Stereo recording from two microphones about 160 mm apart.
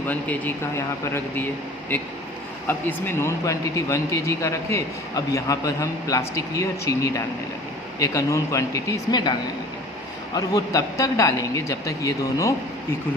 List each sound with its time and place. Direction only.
0.1 s speech: 10° left (ahead or behind)
10.3 s speech: 25° left (ahead or behind)